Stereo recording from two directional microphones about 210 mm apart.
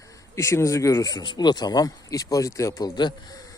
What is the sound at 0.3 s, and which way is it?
Speech, 15° left (ahead or behind).